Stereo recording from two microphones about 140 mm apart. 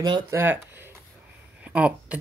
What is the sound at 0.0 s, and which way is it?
Speech, 30° right (ahead or behind).